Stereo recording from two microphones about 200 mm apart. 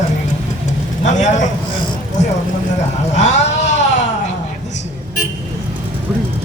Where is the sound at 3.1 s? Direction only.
35° left (ahead or behind).